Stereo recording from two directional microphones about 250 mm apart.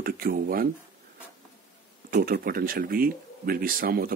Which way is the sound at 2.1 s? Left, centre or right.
Right.